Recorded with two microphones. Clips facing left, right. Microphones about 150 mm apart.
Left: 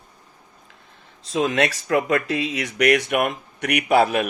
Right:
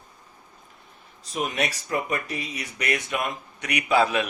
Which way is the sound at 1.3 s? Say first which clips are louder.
Left 7 dB; 90° left.